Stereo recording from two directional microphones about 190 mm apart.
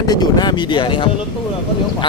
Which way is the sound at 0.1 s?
20° left (ahead or behind).